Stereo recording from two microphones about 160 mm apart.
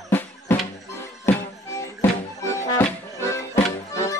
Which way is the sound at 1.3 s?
15° left (ahead or behind).